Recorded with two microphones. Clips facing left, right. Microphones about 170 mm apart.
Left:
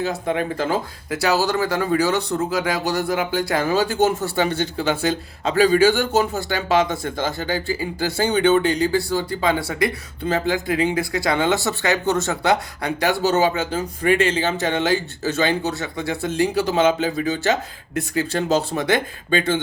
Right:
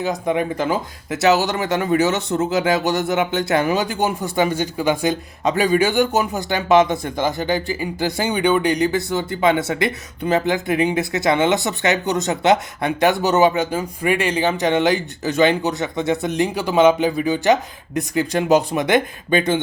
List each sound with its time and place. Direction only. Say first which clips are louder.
0.0 s speech: right 2 dB; 15° right (ahead or behind)